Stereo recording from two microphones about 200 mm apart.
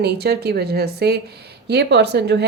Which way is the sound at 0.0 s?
55° right (ahead or behind).